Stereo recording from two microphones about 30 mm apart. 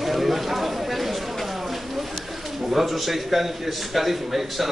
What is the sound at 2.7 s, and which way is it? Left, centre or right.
A man's voice, centre.